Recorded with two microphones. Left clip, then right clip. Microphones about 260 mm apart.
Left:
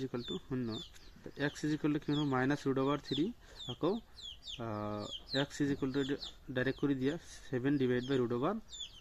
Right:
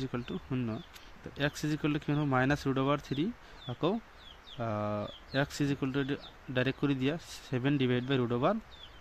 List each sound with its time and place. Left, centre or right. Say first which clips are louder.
0.0 s speech: right 2 dB; right